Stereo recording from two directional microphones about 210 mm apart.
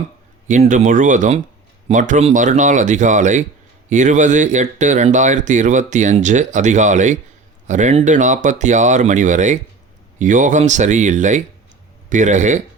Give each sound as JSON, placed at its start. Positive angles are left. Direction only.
{"t": 0.4, "sound": "speech", "side_deg": -35}